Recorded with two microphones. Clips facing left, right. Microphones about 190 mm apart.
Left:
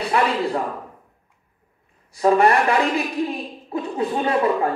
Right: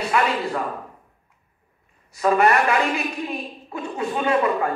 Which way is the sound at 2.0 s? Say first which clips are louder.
Left 2 dB; 30° left (ahead or behind).